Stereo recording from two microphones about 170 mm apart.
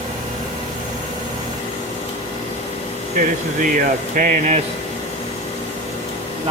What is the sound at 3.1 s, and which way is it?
Speech, 50° right (ahead or behind).